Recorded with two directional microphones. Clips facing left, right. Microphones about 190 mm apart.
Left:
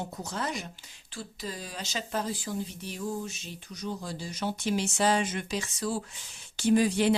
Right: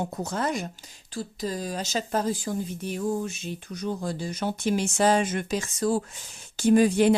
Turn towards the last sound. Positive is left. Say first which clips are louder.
# right 5 dB
turn(degrees=-50)  # may be behind; listen again after turning